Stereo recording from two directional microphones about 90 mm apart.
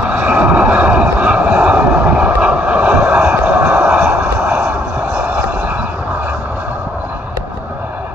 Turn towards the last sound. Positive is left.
turn(degrees=-20)  # may be behind; listen again after turning